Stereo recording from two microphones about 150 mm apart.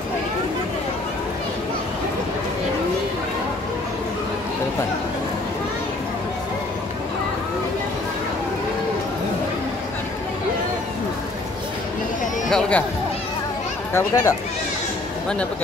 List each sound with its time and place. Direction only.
12.4 s speech: 5° left (ahead or behind)
13.9 s speech: 15° left (ahead or behind)